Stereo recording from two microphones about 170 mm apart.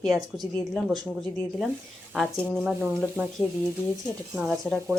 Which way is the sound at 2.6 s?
10° right (ahead or behind).